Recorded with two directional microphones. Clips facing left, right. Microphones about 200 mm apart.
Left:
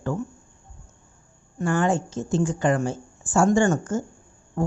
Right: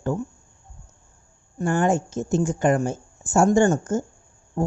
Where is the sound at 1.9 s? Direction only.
45° right (ahead or behind).